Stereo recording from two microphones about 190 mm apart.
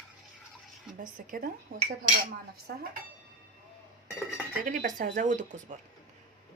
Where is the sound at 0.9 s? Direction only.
45° right (ahead or behind).